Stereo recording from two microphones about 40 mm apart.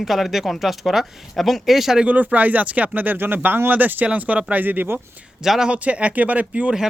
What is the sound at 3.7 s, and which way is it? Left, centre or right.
Speech, right.